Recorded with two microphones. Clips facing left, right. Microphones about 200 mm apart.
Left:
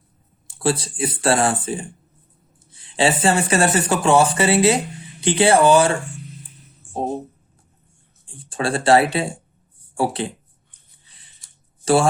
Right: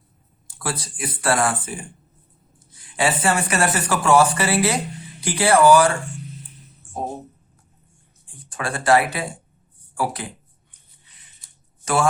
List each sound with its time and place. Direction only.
0.4 s speech: 25° left (ahead or behind)
8.3 s speech: 30° left (ahead or behind)
11.0 s a sound: 30° left (ahead or behind)
11.8 s a man's voice: 30° left (ahead or behind)